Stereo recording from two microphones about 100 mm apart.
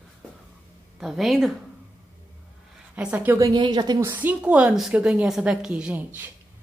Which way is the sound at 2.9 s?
15° right (ahead or behind).